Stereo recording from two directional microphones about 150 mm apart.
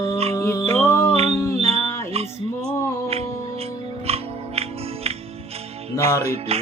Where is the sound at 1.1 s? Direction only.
45° right (ahead or behind).